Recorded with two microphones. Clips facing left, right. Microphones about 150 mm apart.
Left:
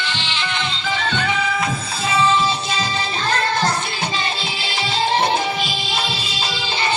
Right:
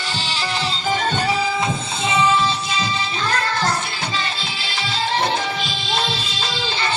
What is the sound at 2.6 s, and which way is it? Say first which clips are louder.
Music: left 1 dB; 40° left (ahead or behind).